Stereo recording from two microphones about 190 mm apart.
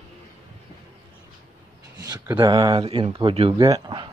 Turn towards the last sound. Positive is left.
turn(degrees=-25)  # may be behind; listen again after turning